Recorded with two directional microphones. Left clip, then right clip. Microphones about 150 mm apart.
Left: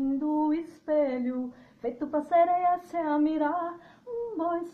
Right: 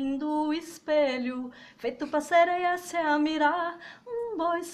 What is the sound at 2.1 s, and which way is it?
Speech, 35° right (ahead or behind).